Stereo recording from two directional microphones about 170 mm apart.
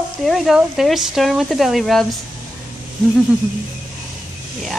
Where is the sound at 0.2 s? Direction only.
Centre (ahead or behind).